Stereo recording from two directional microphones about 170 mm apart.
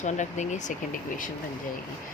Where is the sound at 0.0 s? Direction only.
45° left (ahead or behind).